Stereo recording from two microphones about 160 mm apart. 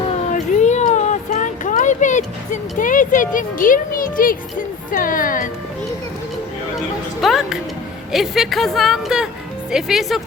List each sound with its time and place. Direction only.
0.3 s a sound: 50° left (ahead or behind)
4.9 s a woman's voice: 60° left (ahead or behind)
7.2 s a woman's voice: centre (ahead or behind)